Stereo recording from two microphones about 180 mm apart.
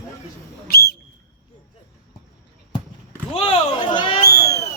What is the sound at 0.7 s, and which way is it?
Whistle, 60° left (ahead or behind).